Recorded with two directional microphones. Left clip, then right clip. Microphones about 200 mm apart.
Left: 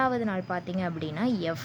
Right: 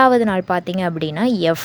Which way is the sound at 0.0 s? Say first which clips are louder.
Right 14 dB; 40° right (ahead or behind).